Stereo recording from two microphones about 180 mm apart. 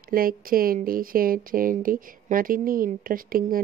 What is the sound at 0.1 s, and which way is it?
Speech, 55° right (ahead or behind).